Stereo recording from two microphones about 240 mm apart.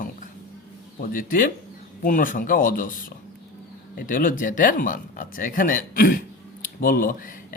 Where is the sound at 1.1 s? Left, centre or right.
Left.